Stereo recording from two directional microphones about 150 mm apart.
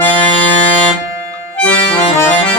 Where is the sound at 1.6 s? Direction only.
10° left (ahead or behind).